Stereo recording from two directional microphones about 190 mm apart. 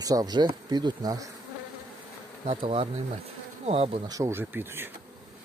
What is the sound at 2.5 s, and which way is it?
Speech, 30° right (ahead or behind).